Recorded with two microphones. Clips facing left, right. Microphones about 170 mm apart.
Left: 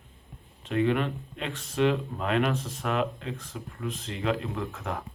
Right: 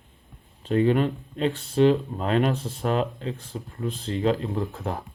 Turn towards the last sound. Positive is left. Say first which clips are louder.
# right 4 dB
turn(degrees=-30)  # may be behind; listen again after turning